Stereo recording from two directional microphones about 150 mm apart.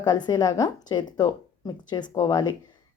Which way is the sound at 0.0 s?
30° left (ahead or behind).